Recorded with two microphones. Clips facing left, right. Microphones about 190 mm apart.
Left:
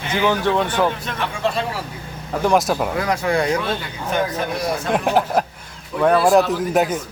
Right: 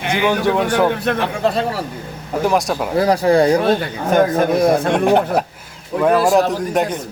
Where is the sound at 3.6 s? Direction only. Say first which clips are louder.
Right 8 dB; 50° right (ahead or behind).